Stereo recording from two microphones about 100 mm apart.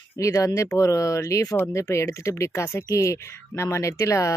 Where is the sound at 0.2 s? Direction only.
30° left (ahead or behind).